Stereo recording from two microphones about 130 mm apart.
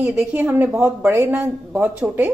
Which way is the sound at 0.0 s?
10° right (ahead or behind).